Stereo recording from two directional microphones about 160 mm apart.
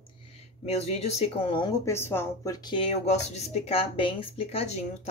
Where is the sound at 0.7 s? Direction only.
40° left (ahead or behind).